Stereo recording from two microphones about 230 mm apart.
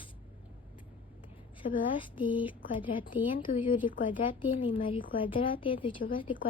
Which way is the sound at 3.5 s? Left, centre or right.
Left.